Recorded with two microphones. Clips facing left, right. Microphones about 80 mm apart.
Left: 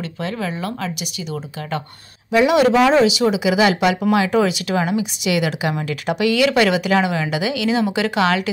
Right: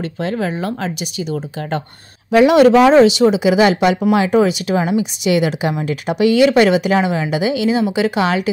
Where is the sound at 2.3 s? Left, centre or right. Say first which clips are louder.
Right 5 dB; right.